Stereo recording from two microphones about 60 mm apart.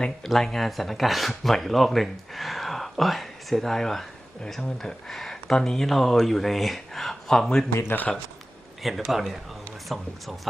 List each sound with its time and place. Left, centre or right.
0.2 s speech: centre
7.7 s speech: left
8.8 s speech: centre